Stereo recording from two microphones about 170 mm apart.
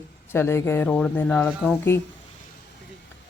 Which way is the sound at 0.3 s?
15° left (ahead or behind).